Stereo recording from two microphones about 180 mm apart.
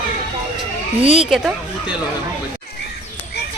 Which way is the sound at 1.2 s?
Centre (ahead or behind).